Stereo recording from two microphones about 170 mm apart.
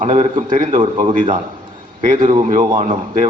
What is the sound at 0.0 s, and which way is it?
A man's voice, 45° right (ahead or behind).